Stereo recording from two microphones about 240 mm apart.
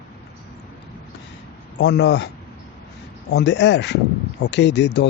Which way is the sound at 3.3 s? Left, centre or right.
Left.